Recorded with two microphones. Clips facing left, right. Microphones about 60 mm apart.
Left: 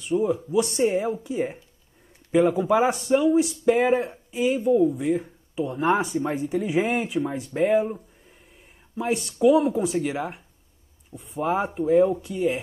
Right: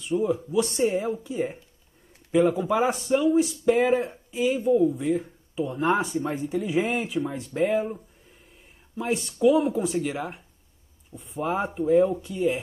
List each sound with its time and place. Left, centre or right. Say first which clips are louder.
0.1 s a man's voice: left 2 dB; centre
8.9 s a man's voice: left 2 dB; centre